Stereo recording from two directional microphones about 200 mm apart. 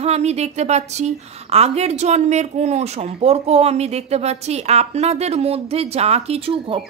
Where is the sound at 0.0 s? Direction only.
30° right (ahead or behind).